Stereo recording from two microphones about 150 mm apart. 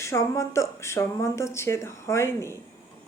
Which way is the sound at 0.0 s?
20° left (ahead or behind).